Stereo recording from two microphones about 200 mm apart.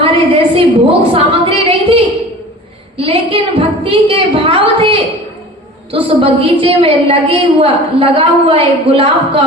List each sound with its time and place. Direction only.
0.0 s a woman's voice: 25° right (ahead or behind)
3.0 s a sound: 25° right (ahead or behind)
3.8 s a woman's voice: 25° right (ahead or behind)